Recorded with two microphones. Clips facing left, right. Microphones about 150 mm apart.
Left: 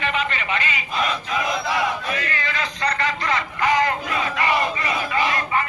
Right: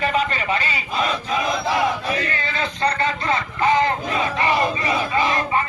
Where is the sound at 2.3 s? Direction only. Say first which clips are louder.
Right 2 dB; 30° right (ahead or behind).